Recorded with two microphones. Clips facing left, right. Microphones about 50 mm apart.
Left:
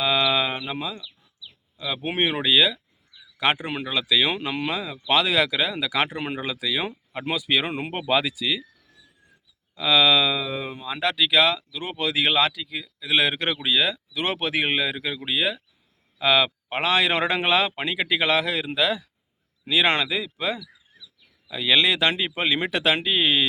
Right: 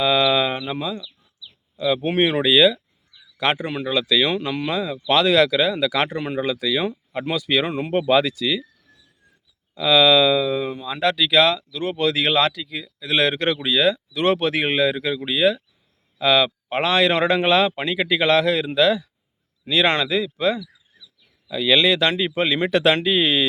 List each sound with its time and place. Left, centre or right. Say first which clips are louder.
0.0 s a sound: right 4 dB; centre
1.8 s speech: right 6 dB; centre
3.3 s a man's voice: right 2 dB; centre
9.7 s speech: right 4 dB; centre